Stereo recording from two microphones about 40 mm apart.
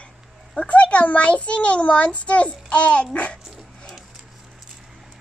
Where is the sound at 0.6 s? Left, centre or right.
Left.